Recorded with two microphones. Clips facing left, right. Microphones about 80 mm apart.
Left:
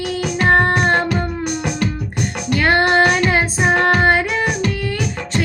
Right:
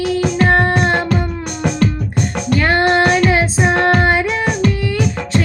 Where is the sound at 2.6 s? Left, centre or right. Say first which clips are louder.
Even; centre.